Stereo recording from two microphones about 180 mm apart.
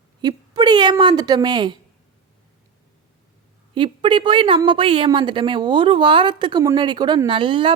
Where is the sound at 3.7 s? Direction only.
25° right (ahead or behind).